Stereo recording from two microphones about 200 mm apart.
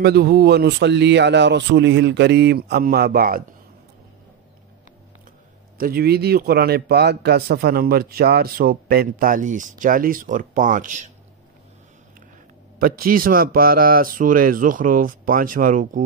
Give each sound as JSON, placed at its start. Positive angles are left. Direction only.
{"t": 0.0, "sound": "speech", "side_deg": -50}
{"t": 5.8, "sound": "a man's voice", "side_deg": -50}
{"t": 12.7, "sound": "a man's voice", "side_deg": -45}